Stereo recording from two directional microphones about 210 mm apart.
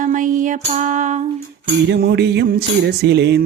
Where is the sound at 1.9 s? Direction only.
50° right (ahead or behind).